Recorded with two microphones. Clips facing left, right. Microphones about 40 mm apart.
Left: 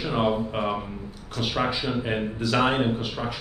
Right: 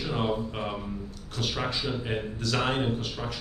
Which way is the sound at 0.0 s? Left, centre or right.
Left.